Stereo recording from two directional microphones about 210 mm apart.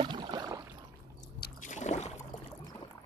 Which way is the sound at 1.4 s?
35° left (ahead or behind).